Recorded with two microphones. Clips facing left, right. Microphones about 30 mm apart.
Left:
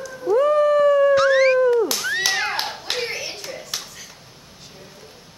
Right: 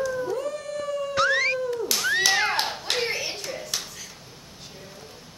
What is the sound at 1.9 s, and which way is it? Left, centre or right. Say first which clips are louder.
Children playing: even; centre.